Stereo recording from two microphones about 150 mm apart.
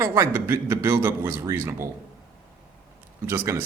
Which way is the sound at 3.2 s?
15° right (ahead or behind).